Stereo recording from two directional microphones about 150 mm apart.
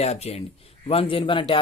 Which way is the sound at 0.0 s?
45° left (ahead or behind).